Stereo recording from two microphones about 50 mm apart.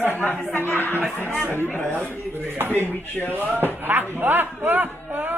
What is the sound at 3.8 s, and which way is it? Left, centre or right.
A man's voice, right.